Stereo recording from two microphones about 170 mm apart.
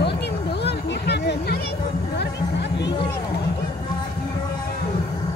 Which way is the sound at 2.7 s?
90° left.